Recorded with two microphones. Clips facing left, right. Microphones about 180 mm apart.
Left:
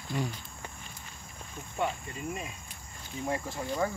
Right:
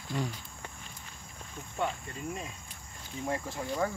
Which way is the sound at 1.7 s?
10° left (ahead or behind).